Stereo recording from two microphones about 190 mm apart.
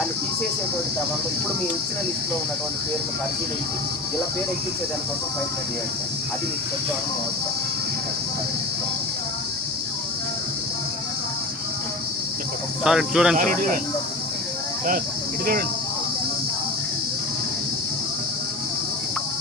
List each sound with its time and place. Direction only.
12.8 s speech: 5° right (ahead or behind)
13.3 s speech: 45° right (ahead or behind)